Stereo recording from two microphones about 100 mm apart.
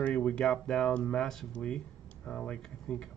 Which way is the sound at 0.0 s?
10° left (ahead or behind).